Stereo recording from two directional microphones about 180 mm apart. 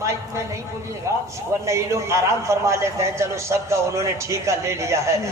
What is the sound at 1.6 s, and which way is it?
A man's voice, 15° right (ahead or behind).